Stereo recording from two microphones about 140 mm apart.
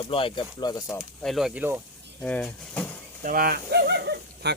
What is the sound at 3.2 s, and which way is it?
Speech, 85° right.